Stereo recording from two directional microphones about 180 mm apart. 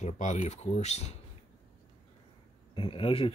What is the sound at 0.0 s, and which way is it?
Speech, 40° left (ahead or behind).